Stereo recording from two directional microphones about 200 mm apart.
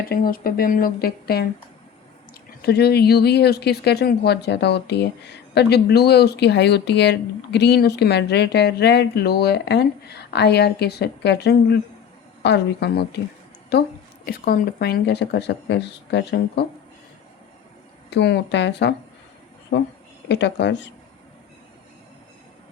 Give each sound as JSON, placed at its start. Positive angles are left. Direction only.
{"t": 0.0, "sound": "speech", "side_deg": 45}
{"t": 2.6, "sound": "speech", "side_deg": 55}
{"t": 18.1, "sound": "speech", "side_deg": 60}
{"t": 20.2, "sound": "speech", "side_deg": 60}